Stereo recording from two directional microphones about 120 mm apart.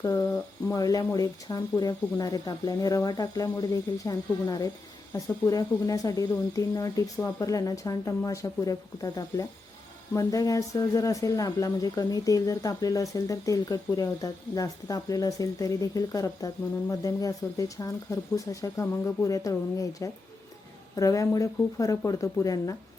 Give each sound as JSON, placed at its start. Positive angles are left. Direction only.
{"t": 0.0, "sound": "speech", "side_deg": 25}